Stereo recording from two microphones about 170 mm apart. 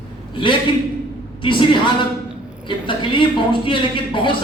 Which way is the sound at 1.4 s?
30° left (ahead or behind).